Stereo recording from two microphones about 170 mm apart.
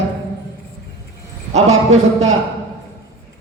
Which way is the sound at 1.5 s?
40° right (ahead or behind).